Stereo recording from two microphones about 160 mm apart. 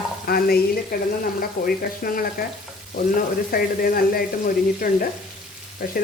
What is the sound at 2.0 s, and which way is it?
Speech, 60° left (ahead or behind).